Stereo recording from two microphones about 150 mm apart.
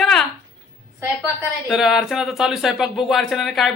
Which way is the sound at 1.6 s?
Centre (ahead or behind).